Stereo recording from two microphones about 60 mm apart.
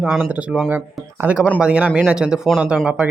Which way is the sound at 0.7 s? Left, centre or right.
Right.